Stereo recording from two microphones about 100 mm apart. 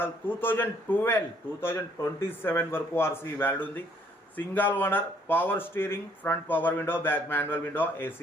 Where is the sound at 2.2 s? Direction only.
20° left (ahead or behind).